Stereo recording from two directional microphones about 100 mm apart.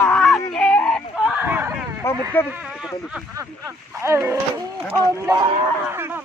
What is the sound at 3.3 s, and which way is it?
Speech, 25° right (ahead or behind).